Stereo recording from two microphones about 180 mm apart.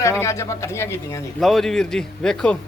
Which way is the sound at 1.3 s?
Centre (ahead or behind).